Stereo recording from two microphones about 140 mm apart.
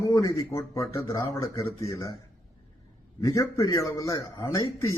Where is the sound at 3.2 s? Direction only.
25° left (ahead or behind).